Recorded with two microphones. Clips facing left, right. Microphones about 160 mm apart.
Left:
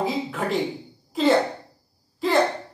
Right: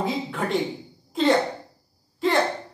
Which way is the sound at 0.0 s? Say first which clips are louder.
Left 1 dB; centre (ahead or behind).